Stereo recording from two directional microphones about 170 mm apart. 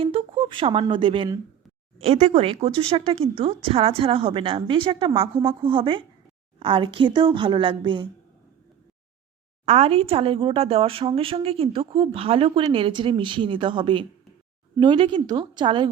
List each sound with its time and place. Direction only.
0.0 s a woman's voice: 30° right (ahead or behind)
9.6 s a woman's voice: 35° right (ahead or behind)